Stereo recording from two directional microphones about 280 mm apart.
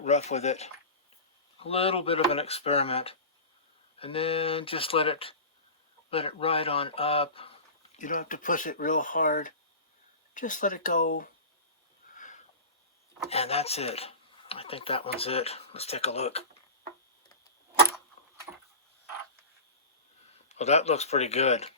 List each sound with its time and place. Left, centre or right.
0.0 s speech: left
12.1 s sniff: left
13.3 s speech: left
20.5 s speech: left